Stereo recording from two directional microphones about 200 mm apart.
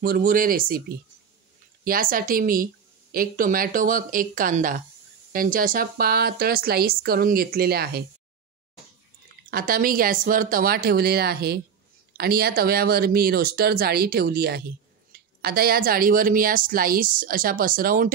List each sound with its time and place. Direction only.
0.0 s speech: 45° right (ahead or behind)
1.9 s speech: 45° right (ahead or behind)
9.5 s speech: 45° right (ahead or behind)